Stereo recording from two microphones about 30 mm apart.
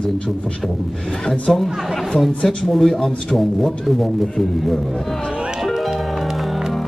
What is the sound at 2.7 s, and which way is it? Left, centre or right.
A man's voice, centre.